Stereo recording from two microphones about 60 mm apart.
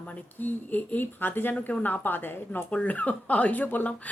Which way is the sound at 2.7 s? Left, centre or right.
Left.